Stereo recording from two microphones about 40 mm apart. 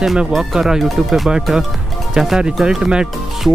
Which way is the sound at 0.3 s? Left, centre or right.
Centre.